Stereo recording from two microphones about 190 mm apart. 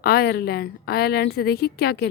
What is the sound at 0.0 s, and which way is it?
A woman's voice, 55° left (ahead or behind).